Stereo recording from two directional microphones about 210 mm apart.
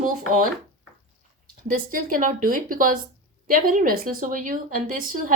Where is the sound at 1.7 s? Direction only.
40° right (ahead or behind).